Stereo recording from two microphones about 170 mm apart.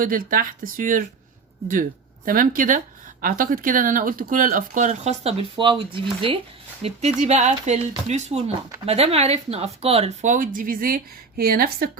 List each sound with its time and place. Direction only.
0.0 s speech: 55° right (ahead or behind)
2.2 s speech: 55° right (ahead or behind); by 6.4 s 30° right (ahead or behind)
6.8 s speech: 40° right (ahead or behind); by 11.9 s 60° right (ahead or behind)